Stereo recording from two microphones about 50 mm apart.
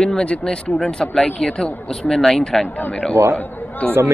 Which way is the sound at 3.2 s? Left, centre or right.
Right.